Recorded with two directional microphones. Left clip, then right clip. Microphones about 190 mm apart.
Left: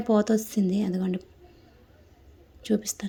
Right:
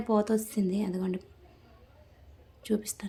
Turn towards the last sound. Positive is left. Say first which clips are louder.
# left 4 dB
turn(degrees=20)  # may be behind; listen again after turning